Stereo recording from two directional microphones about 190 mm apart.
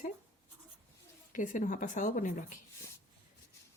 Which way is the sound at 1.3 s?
45° left (ahead or behind).